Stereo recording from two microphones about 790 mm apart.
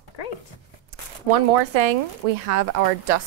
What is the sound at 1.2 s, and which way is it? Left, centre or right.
Speech, right.